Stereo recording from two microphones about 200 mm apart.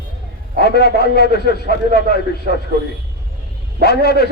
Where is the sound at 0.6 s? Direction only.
55° left (ahead or behind).